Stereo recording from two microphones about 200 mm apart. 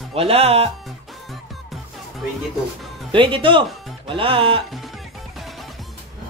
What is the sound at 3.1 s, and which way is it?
A woman's voice, 25° right (ahead or behind).